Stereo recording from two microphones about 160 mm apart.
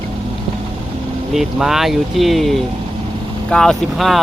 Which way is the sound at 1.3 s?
Centre (ahead or behind).